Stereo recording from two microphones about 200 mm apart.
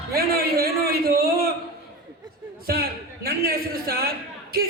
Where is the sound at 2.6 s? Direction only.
50° right (ahead or behind).